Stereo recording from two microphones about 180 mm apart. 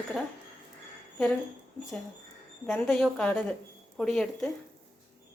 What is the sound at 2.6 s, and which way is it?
Speech, 5° left (ahead or behind).